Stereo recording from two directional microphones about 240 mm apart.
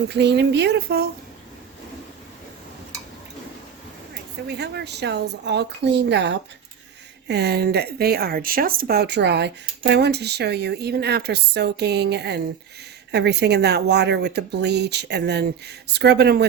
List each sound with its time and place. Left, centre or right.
0.1 s speech: right
4.1 s speech: right